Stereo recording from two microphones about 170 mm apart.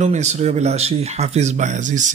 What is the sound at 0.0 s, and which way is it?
Speech, 45° right (ahead or behind).